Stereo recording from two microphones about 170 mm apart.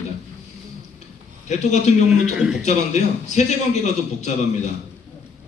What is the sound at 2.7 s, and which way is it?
A man's voice, 45° left (ahead or behind).